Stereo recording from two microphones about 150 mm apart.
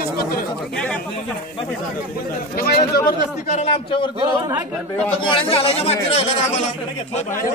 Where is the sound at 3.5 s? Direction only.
40° left (ahead or behind).